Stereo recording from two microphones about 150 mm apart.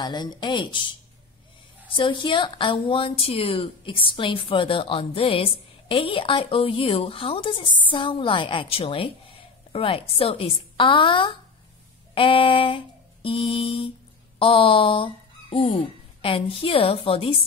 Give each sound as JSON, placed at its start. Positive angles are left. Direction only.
{"t": 0.0, "sound": "a woman's voice", "side_deg": 30}
{"t": 2.0, "sound": "a woman's voice", "side_deg": 35}
{"t": 12.1, "sound": "a sound", "side_deg": 35}
{"t": 14.4, "sound": "speech", "side_deg": 35}